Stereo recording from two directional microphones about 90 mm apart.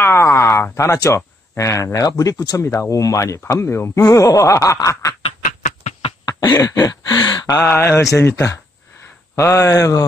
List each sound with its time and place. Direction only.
0.0 s a sound: 25° left (ahead or behind)
0.7 s speech: 35° left (ahead or behind)
6.2 s speech: 45° left (ahead or behind)
7.6 s speech: 25° left (ahead or behind)